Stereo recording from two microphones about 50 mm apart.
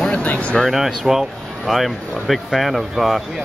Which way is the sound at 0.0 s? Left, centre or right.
Left.